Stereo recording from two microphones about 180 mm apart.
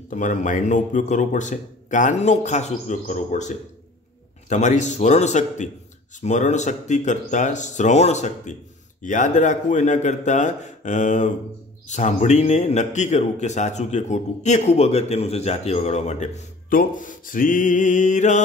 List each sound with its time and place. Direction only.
0.1 s a man's voice: 45° left (ahead or behind)